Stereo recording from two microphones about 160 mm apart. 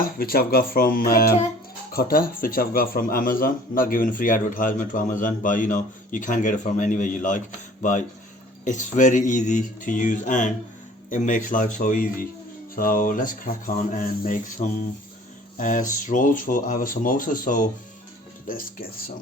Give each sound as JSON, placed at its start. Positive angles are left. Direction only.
{"t": 0.2, "sound": "speech", "side_deg": 70}